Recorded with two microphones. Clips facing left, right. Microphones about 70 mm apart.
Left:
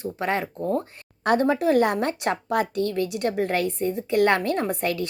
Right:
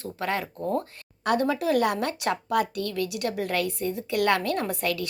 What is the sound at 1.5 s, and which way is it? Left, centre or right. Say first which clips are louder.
A woman's voice: left 3 dB; left.